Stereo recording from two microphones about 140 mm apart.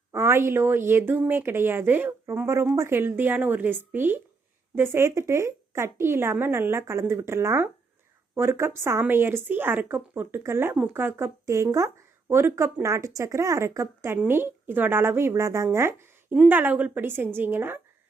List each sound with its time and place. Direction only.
0.1 s a woman's voice: 20° right (ahead or behind)